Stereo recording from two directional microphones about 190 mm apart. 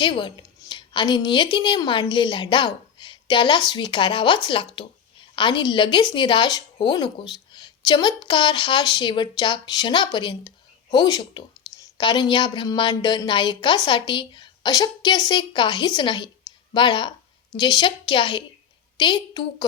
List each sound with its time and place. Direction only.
0.0 s a woman's voice: 25° left (ahead or behind)